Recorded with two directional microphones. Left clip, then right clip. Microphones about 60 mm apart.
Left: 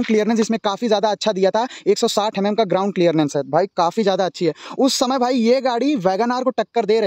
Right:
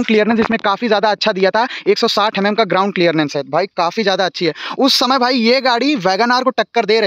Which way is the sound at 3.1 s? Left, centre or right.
Left.